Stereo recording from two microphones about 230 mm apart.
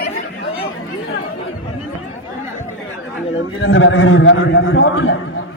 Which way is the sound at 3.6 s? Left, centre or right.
Left.